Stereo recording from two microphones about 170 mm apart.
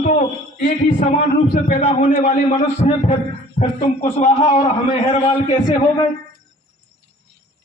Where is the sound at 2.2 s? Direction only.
40° left (ahead or behind).